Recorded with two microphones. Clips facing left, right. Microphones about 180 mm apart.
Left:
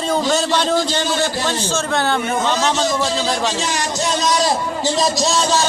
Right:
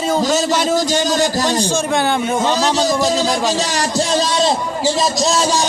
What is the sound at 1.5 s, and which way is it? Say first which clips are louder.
A man's voice: right 3 dB; 15° right (ahead or behind).